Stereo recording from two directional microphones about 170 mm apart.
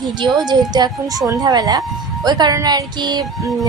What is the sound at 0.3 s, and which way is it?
Speech, 25° right (ahead or behind).